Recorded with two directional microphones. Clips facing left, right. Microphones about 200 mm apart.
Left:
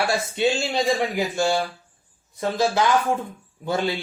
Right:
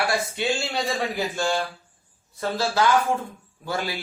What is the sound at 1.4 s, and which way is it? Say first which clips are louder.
Speech: left 4 dB; 15° left (ahead or behind).